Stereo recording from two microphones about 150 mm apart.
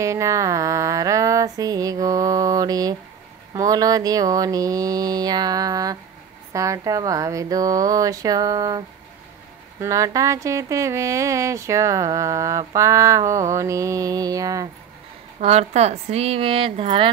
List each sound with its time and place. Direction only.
0.0 s mantra: 20° right (ahead or behind)
3.5 s speech: 25° right (ahead or behind)
15.4 s a woman's voice: 45° right (ahead or behind)